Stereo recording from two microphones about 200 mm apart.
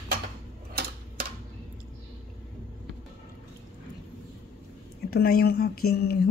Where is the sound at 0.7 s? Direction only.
50° right (ahead or behind).